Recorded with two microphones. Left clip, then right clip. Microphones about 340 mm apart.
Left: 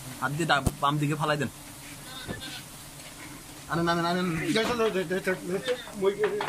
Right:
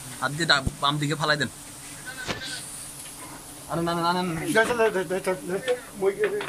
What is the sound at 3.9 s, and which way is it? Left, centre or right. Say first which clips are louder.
Speech: right 3 dB; centre.